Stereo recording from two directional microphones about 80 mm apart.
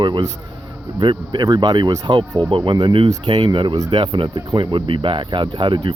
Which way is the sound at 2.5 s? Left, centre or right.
Right.